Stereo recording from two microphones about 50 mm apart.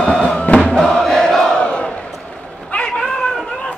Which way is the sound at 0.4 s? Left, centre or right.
Left.